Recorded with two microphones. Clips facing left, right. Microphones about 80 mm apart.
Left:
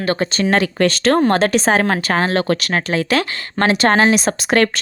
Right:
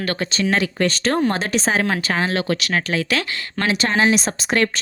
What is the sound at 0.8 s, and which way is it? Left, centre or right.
Speech, left.